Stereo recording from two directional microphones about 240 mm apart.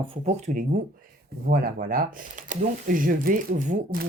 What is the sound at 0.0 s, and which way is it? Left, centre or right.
Speech, right.